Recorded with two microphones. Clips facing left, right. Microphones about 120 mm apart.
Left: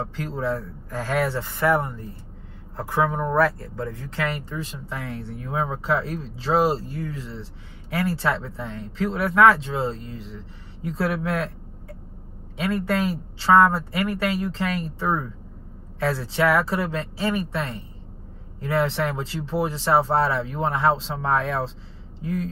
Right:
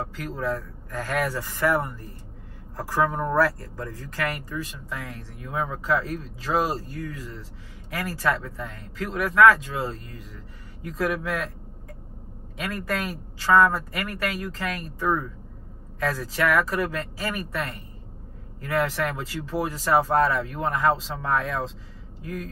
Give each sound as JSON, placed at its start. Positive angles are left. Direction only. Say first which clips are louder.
{"t": 0.0, "sound": "speech", "louder": "left 2 dB", "side_deg": 30}
{"t": 12.6, "sound": "speech", "louder": "left 6 dB", "side_deg": 30}